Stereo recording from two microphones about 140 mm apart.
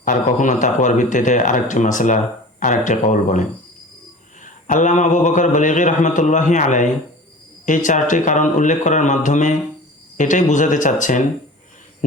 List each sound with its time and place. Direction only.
0.0 s speech: 65° left (ahead or behind)
4.4 s speech: 65° left (ahead or behind)